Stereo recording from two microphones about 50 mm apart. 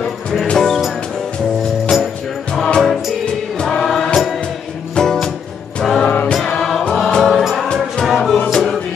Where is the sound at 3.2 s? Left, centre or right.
Centre.